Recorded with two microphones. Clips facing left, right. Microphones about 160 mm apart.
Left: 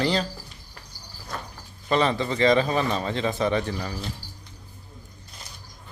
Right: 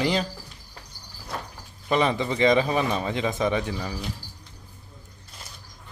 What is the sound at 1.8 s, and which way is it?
Speech, 10° right (ahead or behind).